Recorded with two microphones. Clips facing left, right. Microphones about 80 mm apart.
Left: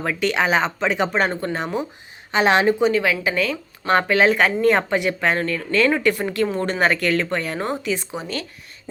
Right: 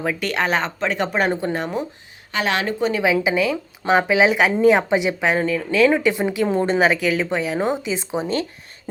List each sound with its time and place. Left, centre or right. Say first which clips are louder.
0.0 s speech: left 1 dB; centre
2.3 s a woman's voice: left 5 dB; left
2.9 s speech: right 2 dB; centre
6.8 s speech: right 1 dB; centre; by 8.4 s right